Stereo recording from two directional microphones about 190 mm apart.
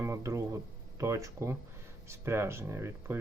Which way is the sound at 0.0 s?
15° right (ahead or behind).